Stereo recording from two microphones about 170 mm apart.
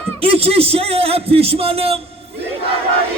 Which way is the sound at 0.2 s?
35° right (ahead or behind).